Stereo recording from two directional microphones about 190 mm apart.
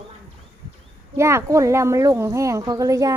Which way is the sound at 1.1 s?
15° right (ahead or behind).